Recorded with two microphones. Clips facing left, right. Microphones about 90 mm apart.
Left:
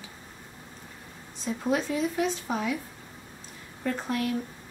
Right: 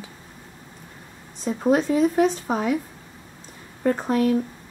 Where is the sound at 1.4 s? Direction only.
45° right (ahead or behind).